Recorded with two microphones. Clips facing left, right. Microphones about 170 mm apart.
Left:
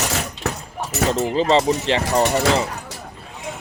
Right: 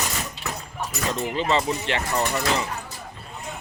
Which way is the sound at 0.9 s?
90° left.